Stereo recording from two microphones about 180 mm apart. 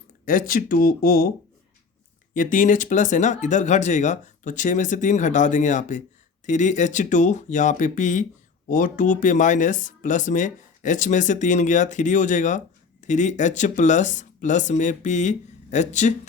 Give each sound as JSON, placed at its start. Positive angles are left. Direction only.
{"t": 0.3, "sound": "speech", "side_deg": 50}
{"t": 2.3, "sound": "speech", "side_deg": 45}